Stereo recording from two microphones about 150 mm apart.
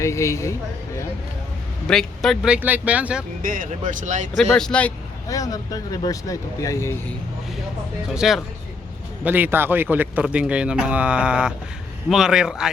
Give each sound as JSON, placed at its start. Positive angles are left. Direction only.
{"t": 0.0, "sound": "speech", "side_deg": 20}
{"t": 1.9, "sound": "a man's voice", "side_deg": 0}
{"t": 3.4, "sound": "speech", "side_deg": -65}
{"t": 4.4, "sound": "a man's voice", "side_deg": 5}
{"t": 5.3, "sound": "speech", "side_deg": 25}
{"t": 8.1, "sound": "a man's voice", "side_deg": -5}